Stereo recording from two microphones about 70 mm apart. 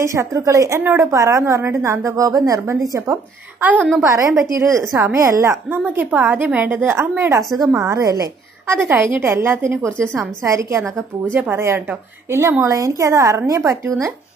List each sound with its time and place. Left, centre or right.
0.0 s a woman's voice: right
1.1 s a woman's voice: right
1.4 s a woman's voice: right
2.6 s a woman's voice: right
3.6 s a woman's voice: right
4.1 s a woman's voice: right
5.8 s a woman's voice: centre; by 8.3 s right
8.7 s a woman's voice: right
11.3 s a woman's voice: right
12.3 s a woman's voice: right